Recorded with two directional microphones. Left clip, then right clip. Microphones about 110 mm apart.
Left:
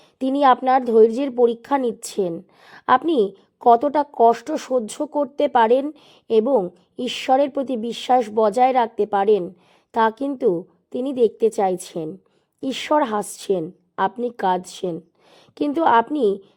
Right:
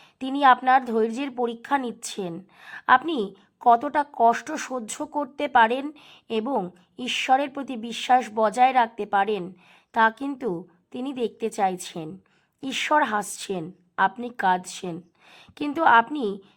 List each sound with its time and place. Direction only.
0.2 s a woman's voice: 40° left (ahead or behind)